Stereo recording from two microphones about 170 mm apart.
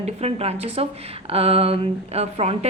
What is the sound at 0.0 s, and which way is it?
A woman's voice, 40° right (ahead or behind).